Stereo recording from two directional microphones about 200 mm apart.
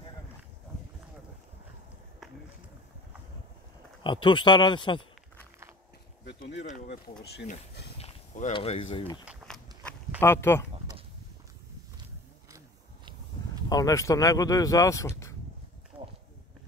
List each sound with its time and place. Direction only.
4.0 s speech: 25° left (ahead or behind)
6.2 s a sound: 60° left (ahead or behind)
8.0 s speech: 35° left (ahead or behind)
9.2 s walk: 5° right (ahead or behind)
10.2 s speech: 10° left (ahead or behind)
12.4 s wild animals: 15° right (ahead or behind)
13.7 s speech: 15° left (ahead or behind)